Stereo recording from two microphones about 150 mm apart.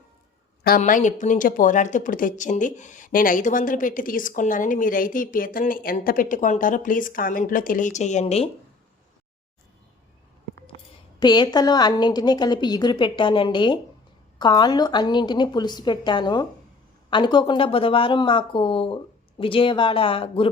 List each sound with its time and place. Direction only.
0.8 s speech: 55° left (ahead or behind)
11.2 s a woman's voice: 30° left (ahead or behind)